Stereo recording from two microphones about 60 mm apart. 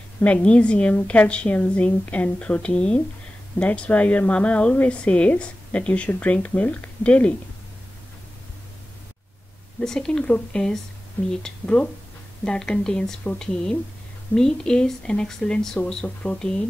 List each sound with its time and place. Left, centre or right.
0.2 s a woman's voice: left
9.8 s speech: centre
14.3 s speech: centre